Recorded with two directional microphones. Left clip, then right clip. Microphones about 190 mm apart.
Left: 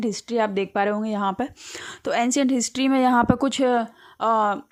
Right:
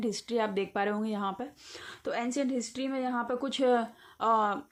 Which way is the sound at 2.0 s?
45° left (ahead or behind).